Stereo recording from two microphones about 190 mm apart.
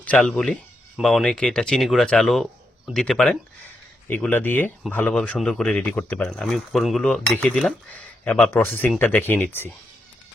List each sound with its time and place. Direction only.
0.0 s speech: 5° left (ahead or behind)